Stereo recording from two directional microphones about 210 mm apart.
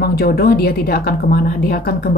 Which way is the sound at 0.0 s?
45° left (ahead or behind).